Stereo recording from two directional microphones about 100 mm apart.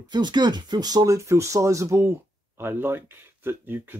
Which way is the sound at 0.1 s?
50° right (ahead or behind).